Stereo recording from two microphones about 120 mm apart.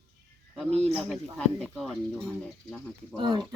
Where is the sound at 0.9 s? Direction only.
5° left (ahead or behind).